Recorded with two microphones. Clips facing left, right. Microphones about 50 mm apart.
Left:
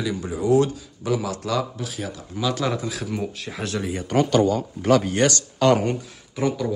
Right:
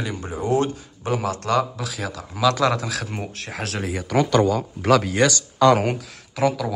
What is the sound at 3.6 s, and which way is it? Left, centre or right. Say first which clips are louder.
Speech: left 1 dB; right.